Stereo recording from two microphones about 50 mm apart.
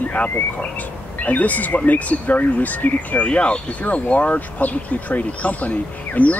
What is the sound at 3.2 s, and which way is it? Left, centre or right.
Speech, left.